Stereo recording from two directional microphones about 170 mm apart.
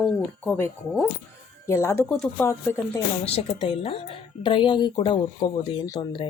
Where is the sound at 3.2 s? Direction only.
35° left (ahead or behind).